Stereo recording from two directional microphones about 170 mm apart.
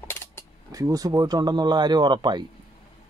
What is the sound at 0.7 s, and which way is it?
Speech, 20° right (ahead or behind).